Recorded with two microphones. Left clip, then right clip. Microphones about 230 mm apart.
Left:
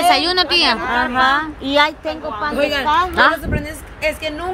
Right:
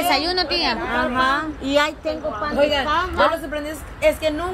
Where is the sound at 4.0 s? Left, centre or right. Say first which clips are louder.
Right 2 dB; left.